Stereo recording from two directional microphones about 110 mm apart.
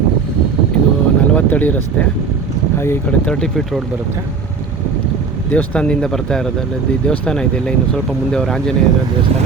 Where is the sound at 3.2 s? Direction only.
5° left (ahead or behind).